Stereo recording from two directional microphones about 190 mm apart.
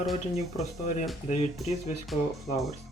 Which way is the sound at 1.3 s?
35° left (ahead or behind).